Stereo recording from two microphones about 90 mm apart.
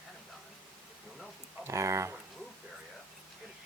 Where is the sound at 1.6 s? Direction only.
35° right (ahead or behind).